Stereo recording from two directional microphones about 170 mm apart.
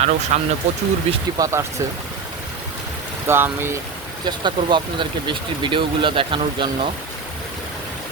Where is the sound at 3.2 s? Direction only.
15° right (ahead or behind).